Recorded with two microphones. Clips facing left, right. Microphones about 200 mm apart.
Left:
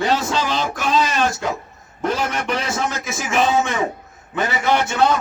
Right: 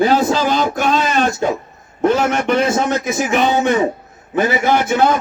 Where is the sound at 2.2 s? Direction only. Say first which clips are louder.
Right 8 dB; 50° right (ahead or behind).